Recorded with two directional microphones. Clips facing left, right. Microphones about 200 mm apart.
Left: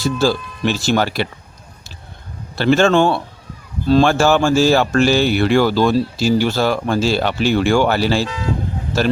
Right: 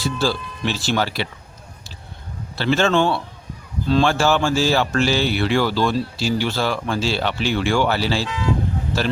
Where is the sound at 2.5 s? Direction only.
50° left (ahead or behind).